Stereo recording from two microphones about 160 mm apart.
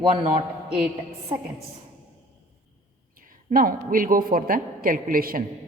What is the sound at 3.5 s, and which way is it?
A woman's voice, 60° right (ahead or behind).